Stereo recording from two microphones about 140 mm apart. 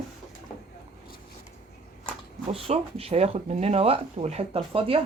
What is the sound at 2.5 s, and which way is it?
Speech, 40° right (ahead or behind).